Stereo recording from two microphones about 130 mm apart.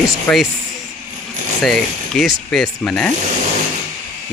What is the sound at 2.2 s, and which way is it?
Speech, centre (ahead or behind).